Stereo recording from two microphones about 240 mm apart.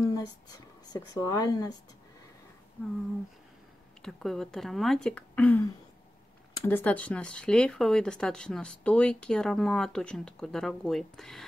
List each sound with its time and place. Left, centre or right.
0.0 s speech: centre
4.0 s speech: centre
6.7 s speech: centre